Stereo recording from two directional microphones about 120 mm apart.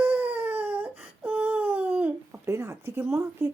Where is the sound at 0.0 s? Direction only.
15° right (ahead or behind).